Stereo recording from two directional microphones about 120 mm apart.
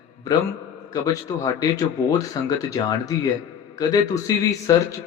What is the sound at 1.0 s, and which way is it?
Speech, 30° left (ahead or behind).